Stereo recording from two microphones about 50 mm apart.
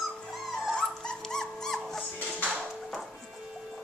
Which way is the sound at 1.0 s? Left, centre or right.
Centre.